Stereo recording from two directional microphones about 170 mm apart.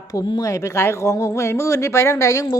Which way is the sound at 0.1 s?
20° left (ahead or behind).